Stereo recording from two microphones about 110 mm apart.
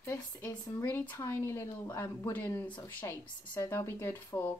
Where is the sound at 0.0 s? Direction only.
25° left (ahead or behind).